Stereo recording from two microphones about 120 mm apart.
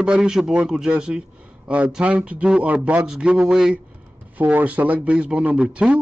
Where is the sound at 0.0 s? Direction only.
5° right (ahead or behind).